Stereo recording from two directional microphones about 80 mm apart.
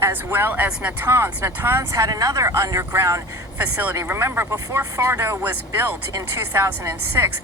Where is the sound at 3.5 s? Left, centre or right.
Right.